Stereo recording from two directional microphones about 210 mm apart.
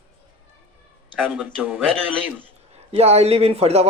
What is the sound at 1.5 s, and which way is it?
Speech, 5° right (ahead or behind).